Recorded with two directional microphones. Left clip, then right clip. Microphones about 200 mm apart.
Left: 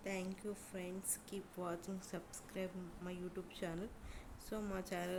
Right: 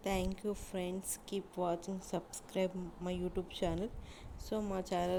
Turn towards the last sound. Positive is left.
turn(degrees=-20)  # may be behind; listen again after turning